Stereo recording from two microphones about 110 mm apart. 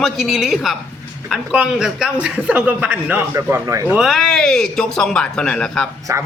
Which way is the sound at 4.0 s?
Centre (ahead or behind).